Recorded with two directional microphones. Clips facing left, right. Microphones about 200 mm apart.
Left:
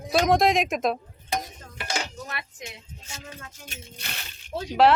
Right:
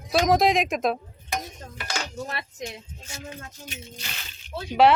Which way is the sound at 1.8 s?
30° left (ahead or behind).